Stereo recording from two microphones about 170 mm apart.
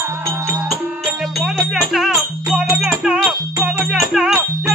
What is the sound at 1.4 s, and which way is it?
Music, centre (ahead or behind).